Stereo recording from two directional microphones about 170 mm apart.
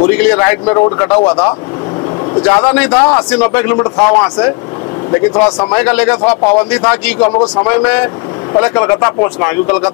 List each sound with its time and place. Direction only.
0.2 s a man's voice: 10° left (ahead or behind)
2.4 s a man's voice: 10° left (ahead or behind)
7.2 s speech: 25° left (ahead or behind)
7.6 s a man's voice: 15° left (ahead or behind)